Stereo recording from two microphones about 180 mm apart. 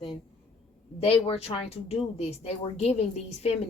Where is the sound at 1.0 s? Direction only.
35° left (ahead or behind).